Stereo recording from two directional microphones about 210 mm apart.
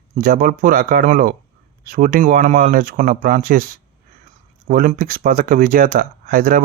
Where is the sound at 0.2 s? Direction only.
45° right (ahead or behind).